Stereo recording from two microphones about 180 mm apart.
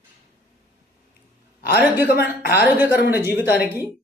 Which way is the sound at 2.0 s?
60° left (ahead or behind).